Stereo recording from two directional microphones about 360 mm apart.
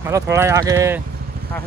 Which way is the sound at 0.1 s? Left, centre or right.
Centre.